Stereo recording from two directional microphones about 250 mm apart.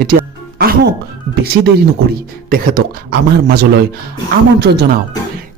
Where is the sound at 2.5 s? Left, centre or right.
Right.